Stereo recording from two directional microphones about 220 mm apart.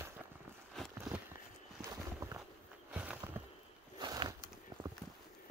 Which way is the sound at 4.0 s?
20° right (ahead or behind).